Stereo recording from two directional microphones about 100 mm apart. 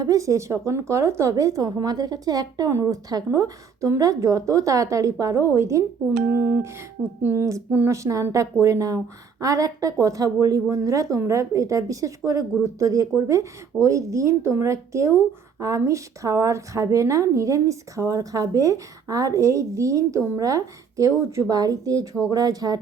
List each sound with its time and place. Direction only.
0.0 s speech: 35° right (ahead or behind)